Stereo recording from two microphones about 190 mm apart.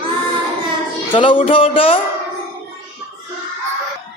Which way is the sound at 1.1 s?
25° left (ahead or behind).